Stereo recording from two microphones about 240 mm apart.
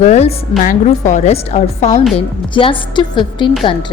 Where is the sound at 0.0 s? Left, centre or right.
Left.